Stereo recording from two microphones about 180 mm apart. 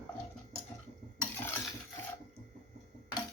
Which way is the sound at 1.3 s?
10° left (ahead or behind).